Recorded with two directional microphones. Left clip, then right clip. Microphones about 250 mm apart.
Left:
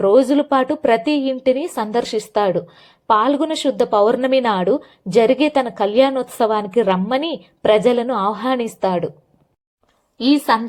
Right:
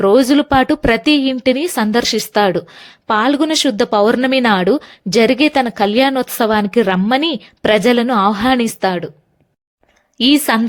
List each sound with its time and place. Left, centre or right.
0.0 s a woman's voice: right
10.2 s a woman's voice: right